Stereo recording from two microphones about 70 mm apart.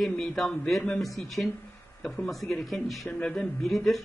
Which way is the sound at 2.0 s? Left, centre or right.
Centre.